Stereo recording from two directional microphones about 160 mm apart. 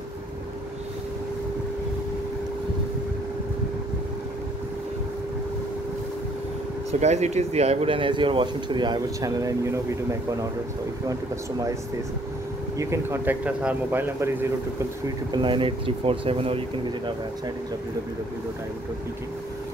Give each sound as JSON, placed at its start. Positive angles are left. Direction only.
{"t": 6.9, "sound": "speech", "side_deg": -45}
{"t": 12.7, "sound": "speech", "side_deg": -15}
{"t": 15.3, "sound": "speech", "side_deg": -30}